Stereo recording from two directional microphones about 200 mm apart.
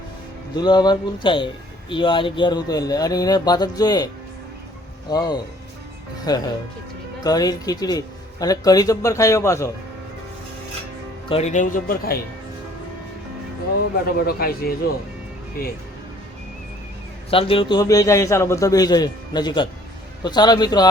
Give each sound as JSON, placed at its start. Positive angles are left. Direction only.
{"t": 0.5, "sound": "speech", "side_deg": 20}
{"t": 11.3, "sound": "speech", "side_deg": 35}
{"t": 14.3, "sound": "a man's voice", "side_deg": 50}
{"t": 17.3, "sound": "speech", "side_deg": 25}